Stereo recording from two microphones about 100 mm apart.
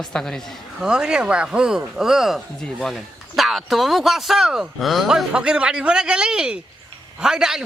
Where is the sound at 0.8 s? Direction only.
5° right (ahead or behind).